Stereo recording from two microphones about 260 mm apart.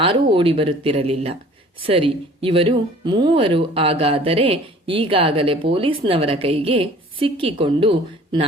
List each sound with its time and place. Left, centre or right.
0.0 s speech: centre